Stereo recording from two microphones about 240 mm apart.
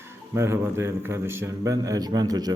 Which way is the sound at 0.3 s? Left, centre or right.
Centre.